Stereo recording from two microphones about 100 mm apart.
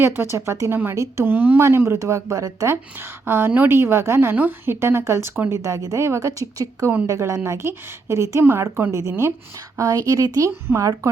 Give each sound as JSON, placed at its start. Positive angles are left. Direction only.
{"t": 0.0, "sound": "a woman's voice", "side_deg": -25}
{"t": 3.2, "sound": "a woman's voice", "side_deg": -25}